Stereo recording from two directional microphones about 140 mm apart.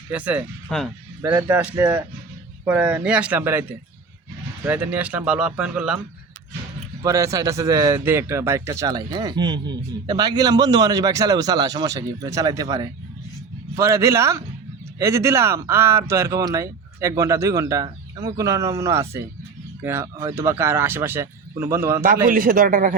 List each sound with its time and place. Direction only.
0.1 s speech: 10° right (ahead or behind)
0.7 s speech: 5° left (ahead or behind)
1.2 s speech: 15° right (ahead or behind)
7.0 s a man's voice: 20° right (ahead or behind)
22.3 s a man's voice: 90° right; by 23.0 s 70° right (ahead or behind)